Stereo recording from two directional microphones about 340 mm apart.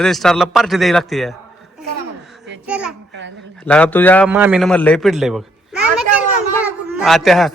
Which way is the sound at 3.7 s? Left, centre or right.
Centre.